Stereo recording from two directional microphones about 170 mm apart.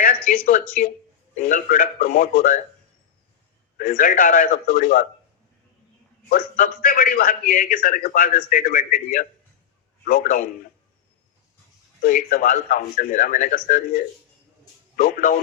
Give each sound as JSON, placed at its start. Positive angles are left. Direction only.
{"t": 0.3, "sound": "a man's voice", "side_deg": 50}
{"t": 3.8, "sound": "a man's voice", "side_deg": 55}
{"t": 6.2, "sound": "a man's voice", "side_deg": 55}
{"t": 12.0, "sound": "a man's voice", "side_deg": 50}